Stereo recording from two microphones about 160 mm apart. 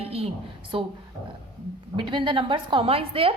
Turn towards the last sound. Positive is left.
turn(degrees=-35)  # may be behind; listen again after turning